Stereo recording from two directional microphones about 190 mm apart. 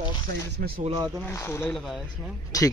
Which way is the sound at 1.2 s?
15° left (ahead or behind).